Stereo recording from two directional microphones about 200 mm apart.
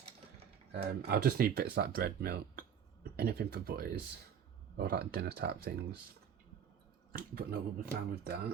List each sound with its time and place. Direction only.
0.7 s speech: 55° right (ahead or behind)
7.1 s speech: 45° right (ahead or behind)